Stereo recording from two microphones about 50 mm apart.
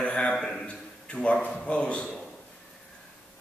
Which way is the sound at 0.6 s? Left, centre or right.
Left.